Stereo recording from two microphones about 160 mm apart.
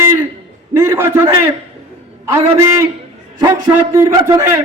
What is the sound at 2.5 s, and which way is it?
A man's voice, 20° right (ahead or behind).